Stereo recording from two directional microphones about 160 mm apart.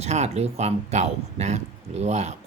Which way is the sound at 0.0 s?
40° right (ahead or behind).